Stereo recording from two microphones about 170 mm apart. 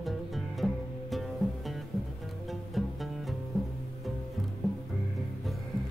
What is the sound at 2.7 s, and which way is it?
Music, centre (ahead or behind).